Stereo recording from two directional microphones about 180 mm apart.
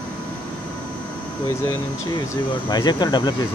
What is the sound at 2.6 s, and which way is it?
Speech, 25° left (ahead or behind).